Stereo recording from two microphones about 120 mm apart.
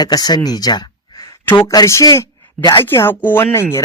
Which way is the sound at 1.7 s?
25° left (ahead or behind).